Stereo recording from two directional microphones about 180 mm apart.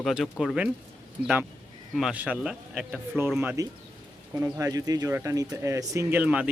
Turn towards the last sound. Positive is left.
turn(degrees=-10)  # may be behind; listen again after turning